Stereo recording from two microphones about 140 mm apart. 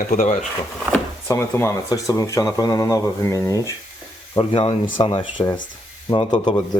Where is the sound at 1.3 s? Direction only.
20° left (ahead or behind).